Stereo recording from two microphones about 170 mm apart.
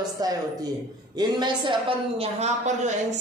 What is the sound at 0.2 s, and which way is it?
A woman's voice, 20° right (ahead or behind).